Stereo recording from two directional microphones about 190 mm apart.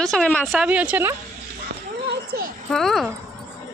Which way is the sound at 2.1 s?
50° right (ahead or behind).